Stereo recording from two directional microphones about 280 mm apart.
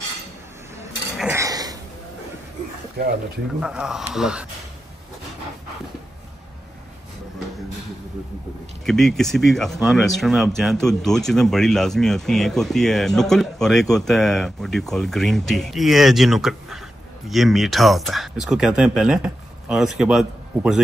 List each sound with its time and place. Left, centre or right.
1.1 s dishes: centre
3.0 s speech: right
3.6 s speech: centre
8.8 s speech: centre